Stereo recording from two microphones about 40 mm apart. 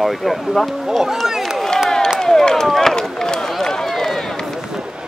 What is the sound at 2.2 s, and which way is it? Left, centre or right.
Run, centre.